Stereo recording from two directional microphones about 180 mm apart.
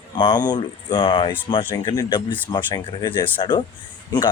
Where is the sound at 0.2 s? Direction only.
25° left (ahead or behind).